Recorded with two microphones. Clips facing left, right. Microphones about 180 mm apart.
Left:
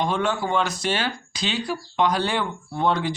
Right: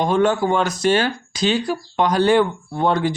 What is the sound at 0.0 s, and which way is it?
Speech, 45° right (ahead or behind).